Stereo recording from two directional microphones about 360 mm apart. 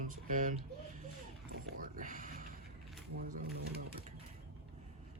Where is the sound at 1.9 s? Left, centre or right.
Right.